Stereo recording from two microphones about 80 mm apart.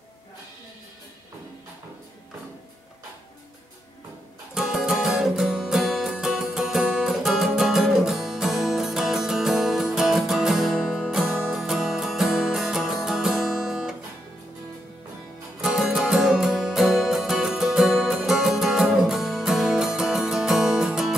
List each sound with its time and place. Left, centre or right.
4.6 s music: centre
15.6 s music: centre